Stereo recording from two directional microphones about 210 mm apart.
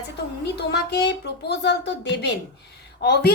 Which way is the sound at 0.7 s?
55° left (ahead or behind).